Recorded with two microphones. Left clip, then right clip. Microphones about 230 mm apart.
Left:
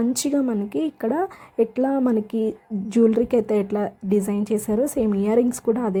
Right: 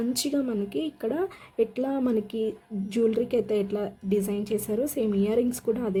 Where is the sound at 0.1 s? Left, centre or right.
Left.